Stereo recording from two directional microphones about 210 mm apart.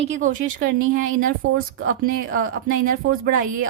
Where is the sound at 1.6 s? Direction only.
75° right (ahead or behind).